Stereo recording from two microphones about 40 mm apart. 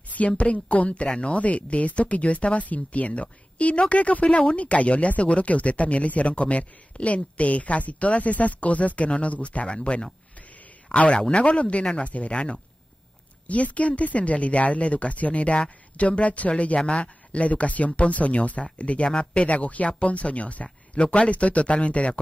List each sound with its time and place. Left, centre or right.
0.4 s speech: left
13.5 s speech: left
16.7 s speech: left